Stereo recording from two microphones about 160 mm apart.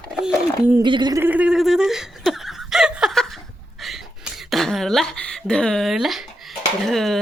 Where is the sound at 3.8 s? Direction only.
Centre (ahead or behind).